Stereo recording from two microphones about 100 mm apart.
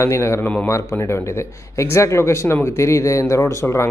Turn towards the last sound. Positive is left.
turn(degrees=30)  # may be behind; listen again after turning